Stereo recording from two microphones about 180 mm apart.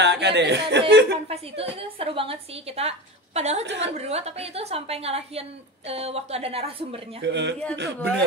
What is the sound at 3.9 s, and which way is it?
A woman's voice, 35° right (ahead or behind).